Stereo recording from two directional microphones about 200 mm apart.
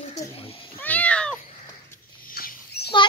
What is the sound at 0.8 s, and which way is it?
Cat, 5° left (ahead or behind).